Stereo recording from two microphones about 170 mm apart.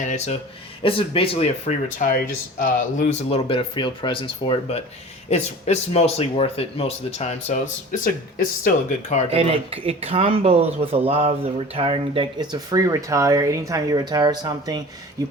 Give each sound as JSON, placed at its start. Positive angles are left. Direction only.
{"t": 0.8, "sound": "speech", "side_deg": 30}
{"t": 2.0, "sound": "speech", "side_deg": 55}
{"t": 9.3, "sound": "speech", "side_deg": -35}